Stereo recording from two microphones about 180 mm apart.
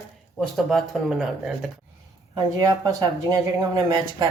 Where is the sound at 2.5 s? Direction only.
20° right (ahead or behind).